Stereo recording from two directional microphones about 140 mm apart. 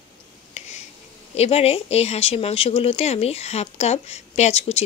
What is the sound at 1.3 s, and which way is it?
Speech, 50° left (ahead or behind).